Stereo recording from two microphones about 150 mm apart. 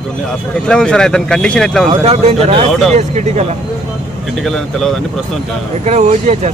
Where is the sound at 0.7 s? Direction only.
5° left (ahead or behind).